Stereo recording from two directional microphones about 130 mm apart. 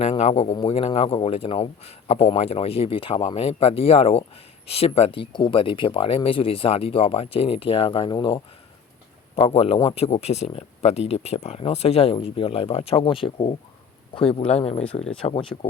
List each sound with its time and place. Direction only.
0.0 s speech: 55° left (ahead or behind)
0.5 s speech: 45° left (ahead or behind)
9.3 s speech: 50° left (ahead or behind)